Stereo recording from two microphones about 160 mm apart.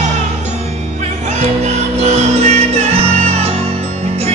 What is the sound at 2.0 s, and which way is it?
Music, 45° right (ahead or behind).